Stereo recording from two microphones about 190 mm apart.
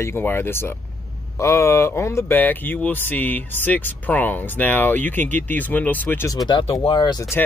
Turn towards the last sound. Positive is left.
turn(degrees=20)  # may be behind; listen again after turning